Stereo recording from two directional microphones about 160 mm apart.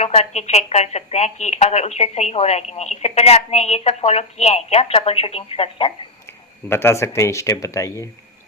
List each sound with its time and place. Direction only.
0.0 s a woman's voice: 40° left (ahead or behind)
6.2 s speech: 15° left (ahead or behind)